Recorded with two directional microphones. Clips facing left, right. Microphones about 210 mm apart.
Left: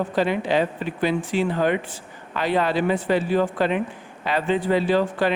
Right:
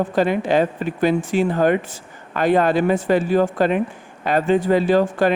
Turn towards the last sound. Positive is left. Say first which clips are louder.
# right 4 dB
turn(degrees=-45)  # may be behind; listen again after turning